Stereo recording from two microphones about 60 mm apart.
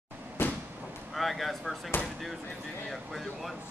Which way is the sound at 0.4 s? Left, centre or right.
Left.